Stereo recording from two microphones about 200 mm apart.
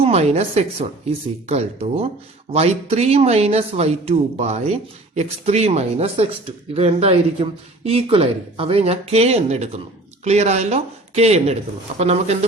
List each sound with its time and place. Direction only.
0.0 s speech: 30° right (ahead or behind)